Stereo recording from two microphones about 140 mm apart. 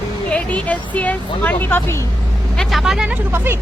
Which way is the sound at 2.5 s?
Centre (ahead or behind).